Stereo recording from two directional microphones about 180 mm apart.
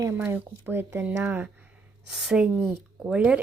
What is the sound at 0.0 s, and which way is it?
Speech, 10° right (ahead or behind).